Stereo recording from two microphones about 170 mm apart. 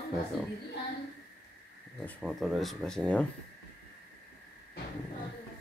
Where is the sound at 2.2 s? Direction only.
Centre (ahead or behind).